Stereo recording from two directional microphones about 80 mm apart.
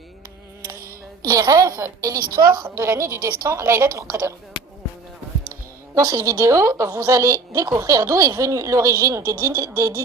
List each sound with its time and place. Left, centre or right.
1.3 s a woman's voice: right
2.7 s a woman's voice: right
5.9 s a woman's voice: right